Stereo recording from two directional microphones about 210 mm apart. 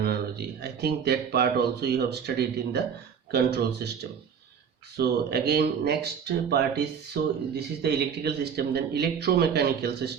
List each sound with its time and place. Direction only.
0.0 s speech: 50° right (ahead or behind)
3.3 s speech: 50° right (ahead or behind)
4.9 s speech: 50° right (ahead or behind)